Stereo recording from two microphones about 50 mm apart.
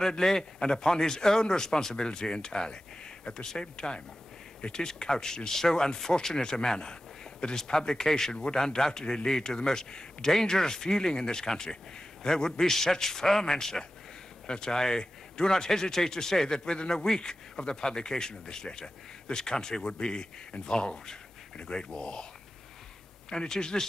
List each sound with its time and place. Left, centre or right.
0.0 s speech: centre
23.3 s speech: centre